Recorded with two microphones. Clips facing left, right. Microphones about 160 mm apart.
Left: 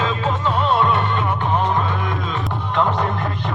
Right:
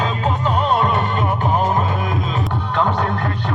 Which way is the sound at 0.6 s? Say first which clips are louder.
Even; 40° right (ahead or behind).